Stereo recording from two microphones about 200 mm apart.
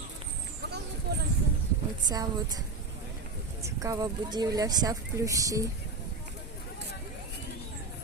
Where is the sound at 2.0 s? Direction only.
20° right (ahead or behind).